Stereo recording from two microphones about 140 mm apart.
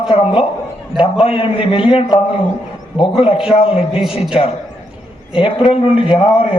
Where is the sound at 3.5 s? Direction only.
40° left (ahead or behind).